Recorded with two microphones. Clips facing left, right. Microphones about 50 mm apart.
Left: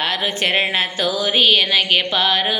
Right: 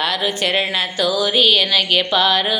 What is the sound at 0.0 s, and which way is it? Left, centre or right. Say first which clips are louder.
A woman's voice: right 1 dB; left.